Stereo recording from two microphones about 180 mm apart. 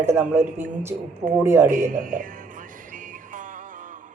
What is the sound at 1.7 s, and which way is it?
Speech, 45° right (ahead or behind).